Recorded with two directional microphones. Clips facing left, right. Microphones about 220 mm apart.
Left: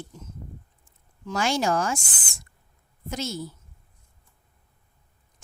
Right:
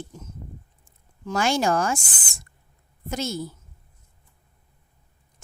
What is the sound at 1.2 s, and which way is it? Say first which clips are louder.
Speech: right 2 dB; 50° right (ahead or behind).